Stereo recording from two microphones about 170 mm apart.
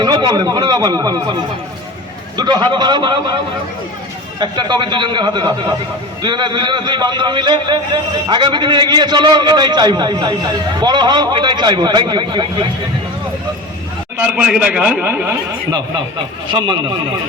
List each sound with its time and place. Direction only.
0.0 s a man's voice: 25° right (ahead or behind)
4.4 s a man's voice: 25° right (ahead or behind)
14.2 s a man's voice: 10° right (ahead or behind)
16.5 s a man's voice: 25° right (ahead or behind)